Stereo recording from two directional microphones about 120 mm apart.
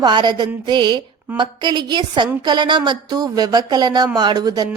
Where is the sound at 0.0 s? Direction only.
40° right (ahead or behind).